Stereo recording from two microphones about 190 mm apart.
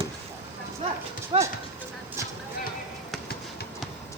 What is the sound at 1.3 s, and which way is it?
Speech, 25° right (ahead or behind).